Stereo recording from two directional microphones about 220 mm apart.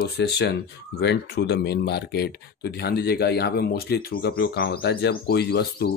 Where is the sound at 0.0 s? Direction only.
50° left (ahead or behind).